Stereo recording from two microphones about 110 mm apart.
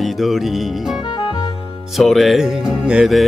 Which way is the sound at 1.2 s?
45° left (ahead or behind).